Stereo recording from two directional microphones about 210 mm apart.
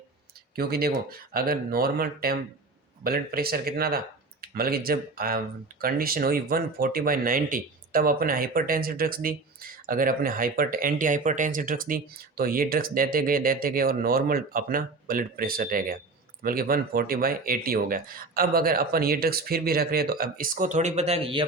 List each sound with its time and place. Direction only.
0.5 s speech: 45° right (ahead or behind); by 21.4 s 25° right (ahead or behind)